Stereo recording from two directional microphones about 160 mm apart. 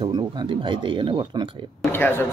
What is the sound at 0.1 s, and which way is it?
Speech, 30° right (ahead or behind).